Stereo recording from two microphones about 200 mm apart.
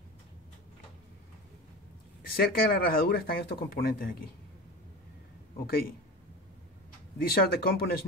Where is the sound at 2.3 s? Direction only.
50° left (ahead or behind).